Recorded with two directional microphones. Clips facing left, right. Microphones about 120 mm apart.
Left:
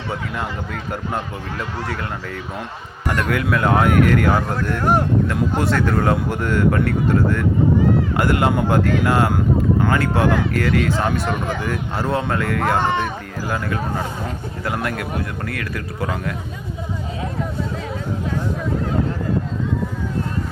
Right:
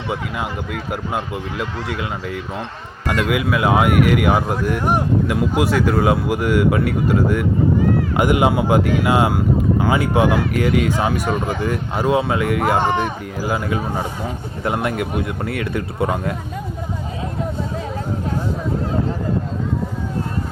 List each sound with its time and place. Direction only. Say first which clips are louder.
0.1 s speech: right 2 dB; 10° right (ahead or behind); by 16.3 s 25° right (ahead or behind)